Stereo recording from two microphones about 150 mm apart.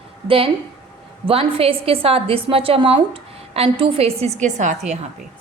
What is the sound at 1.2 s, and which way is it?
A woman's voice, 40° right (ahead or behind).